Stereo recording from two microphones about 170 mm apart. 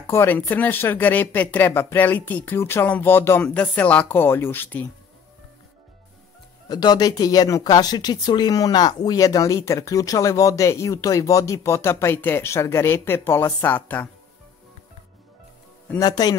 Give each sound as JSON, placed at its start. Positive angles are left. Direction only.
{"t": 0.0, "sound": "speech", "side_deg": 15}
{"t": 6.7, "sound": "speech", "side_deg": 25}
{"t": 16.0, "sound": "speech", "side_deg": 20}